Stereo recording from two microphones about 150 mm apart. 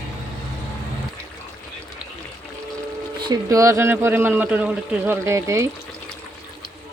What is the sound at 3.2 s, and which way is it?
A man's voice, 25° right (ahead or behind).